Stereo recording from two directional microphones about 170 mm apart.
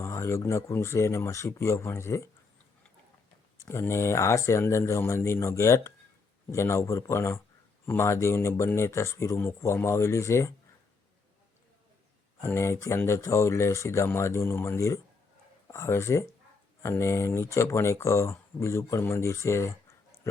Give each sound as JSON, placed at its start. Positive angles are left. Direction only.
{"t": 0.0, "sound": "speech", "side_deg": 15}
{"t": 3.6, "sound": "speech", "side_deg": 15}
{"t": 12.4, "sound": "speech", "side_deg": 15}